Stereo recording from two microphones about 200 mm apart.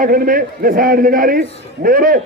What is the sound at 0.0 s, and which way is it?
A man's voice, 45° right (ahead or behind).